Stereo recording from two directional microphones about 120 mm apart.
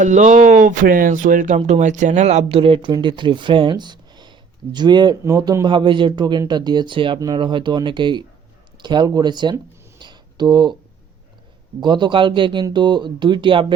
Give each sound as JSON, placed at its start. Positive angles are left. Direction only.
{"t": 0.0, "sound": "speech", "side_deg": -90}
{"t": 5.2, "sound": "a man's voice", "side_deg": -30}
{"t": 10.0, "sound": "a sound", "side_deg": -40}
{"t": 11.8, "sound": "a man's voice", "side_deg": -40}